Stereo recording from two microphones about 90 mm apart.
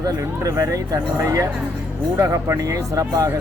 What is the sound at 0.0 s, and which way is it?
Speech, 35° right (ahead or behind).